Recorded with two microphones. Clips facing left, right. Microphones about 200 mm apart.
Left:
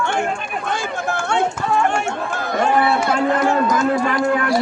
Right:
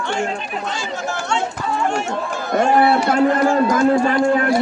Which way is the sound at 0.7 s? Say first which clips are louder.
Left 4 dB; 55° left (ahead or behind).